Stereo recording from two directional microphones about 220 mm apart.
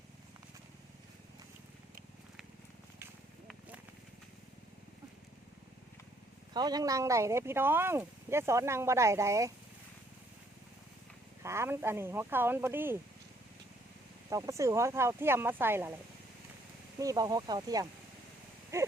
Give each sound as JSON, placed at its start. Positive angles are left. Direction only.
{"t": 6.5, "sound": "speech", "side_deg": -20}
{"t": 11.4, "sound": "speech", "side_deg": -10}
{"t": 14.3, "sound": "speech", "side_deg": -15}
{"t": 17.0, "sound": "speech", "side_deg": -15}